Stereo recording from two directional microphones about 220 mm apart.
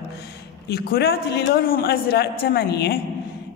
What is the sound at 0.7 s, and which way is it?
A woman's voice, 45° left (ahead or behind).